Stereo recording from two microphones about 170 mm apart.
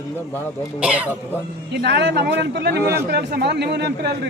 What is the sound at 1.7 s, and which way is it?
Speech, 85° right.